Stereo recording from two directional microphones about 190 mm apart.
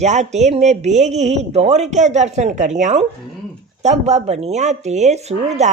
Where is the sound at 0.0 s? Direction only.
40° right (ahead or behind).